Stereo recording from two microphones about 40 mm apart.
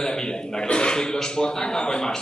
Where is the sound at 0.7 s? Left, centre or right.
Left.